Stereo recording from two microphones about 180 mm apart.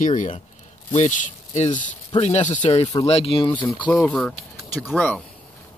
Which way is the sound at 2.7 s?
25° left (ahead or behind).